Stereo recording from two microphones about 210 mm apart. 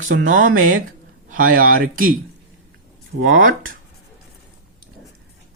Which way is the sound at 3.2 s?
65° right (ahead or behind).